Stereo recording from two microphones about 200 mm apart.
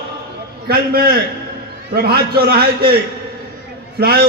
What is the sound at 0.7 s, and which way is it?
A man's voice, 50° right (ahead or behind).